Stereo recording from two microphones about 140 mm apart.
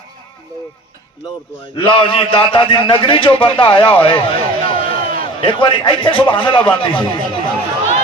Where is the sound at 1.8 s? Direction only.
40° left (ahead or behind).